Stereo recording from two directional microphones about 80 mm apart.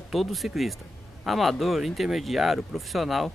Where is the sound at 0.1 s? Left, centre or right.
Centre.